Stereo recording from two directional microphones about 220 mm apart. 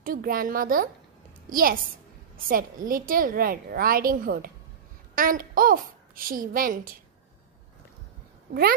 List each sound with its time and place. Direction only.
0.0 s a woman's voice: 40° right (ahead or behind)